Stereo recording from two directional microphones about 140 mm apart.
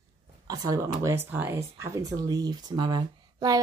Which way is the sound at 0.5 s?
25° right (ahead or behind).